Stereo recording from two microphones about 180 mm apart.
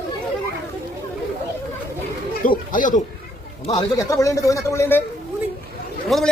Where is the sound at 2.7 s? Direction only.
45° left (ahead or behind).